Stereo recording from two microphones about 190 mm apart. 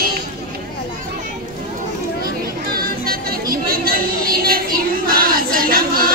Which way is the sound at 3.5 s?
50° right (ahead or behind).